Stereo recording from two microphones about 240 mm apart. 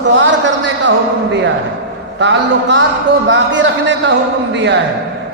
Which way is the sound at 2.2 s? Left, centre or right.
Right.